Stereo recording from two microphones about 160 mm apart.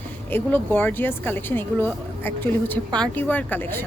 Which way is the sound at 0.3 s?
10° left (ahead or behind).